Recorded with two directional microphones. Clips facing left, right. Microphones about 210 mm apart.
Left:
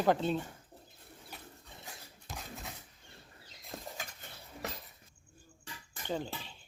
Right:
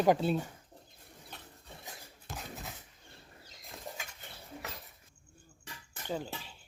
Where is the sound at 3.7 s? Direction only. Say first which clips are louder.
Left 1 dB; 35° left (ahead or behind).